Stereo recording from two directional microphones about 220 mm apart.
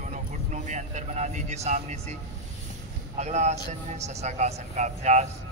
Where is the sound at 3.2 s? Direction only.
30° right (ahead or behind).